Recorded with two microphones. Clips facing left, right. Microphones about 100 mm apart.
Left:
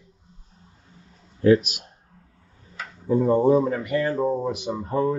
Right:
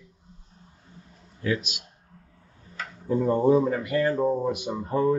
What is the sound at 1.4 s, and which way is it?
Speech, 45° left (ahead or behind).